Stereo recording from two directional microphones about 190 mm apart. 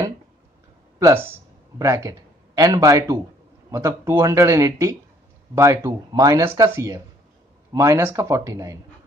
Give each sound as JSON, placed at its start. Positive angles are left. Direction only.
{"t": 0.9, "sound": "speech", "side_deg": -15}